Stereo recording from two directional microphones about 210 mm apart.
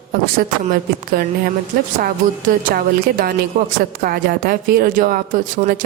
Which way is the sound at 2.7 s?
45° right (ahead or behind).